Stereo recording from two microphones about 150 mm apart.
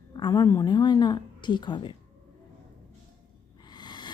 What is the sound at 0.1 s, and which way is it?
A woman's voice, 30° left (ahead or behind).